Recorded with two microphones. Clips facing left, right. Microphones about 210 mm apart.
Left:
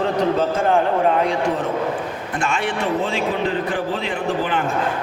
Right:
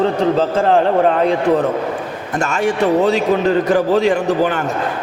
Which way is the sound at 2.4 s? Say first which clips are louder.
Right 7 dB; 45° right (ahead or behind).